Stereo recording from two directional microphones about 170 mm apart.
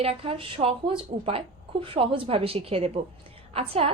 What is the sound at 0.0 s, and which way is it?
A woman's voice, 35° right (ahead or behind).